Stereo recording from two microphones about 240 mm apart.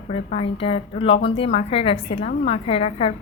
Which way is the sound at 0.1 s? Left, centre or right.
Left.